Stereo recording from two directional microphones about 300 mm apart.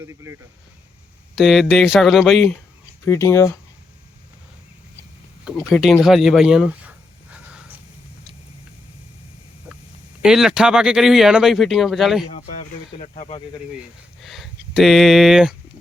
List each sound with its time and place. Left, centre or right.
0.0 s speech: centre
1.4 s speech: centre
5.5 s speech: centre
9.7 s a sound: centre
10.2 s speech: centre
12.3 s speech: left
14.2 s speech: centre